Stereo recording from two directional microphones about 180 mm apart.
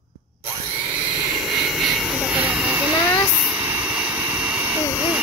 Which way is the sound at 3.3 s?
10° right (ahead or behind).